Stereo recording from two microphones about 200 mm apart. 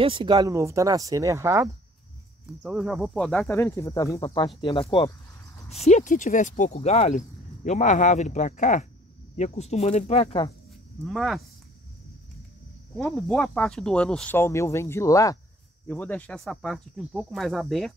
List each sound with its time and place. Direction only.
0.0 s speech: 25° right (ahead or behind)
2.6 s speech: 5° right (ahead or behind)
3.5 s speech: 15° left (ahead or behind)
4.6 s speech: 25° left (ahead or behind)
5.9 s speech: 35° left (ahead or behind)
11.1 s speech: centre (ahead or behind)
12.9 s speech: 5° left (ahead or behind)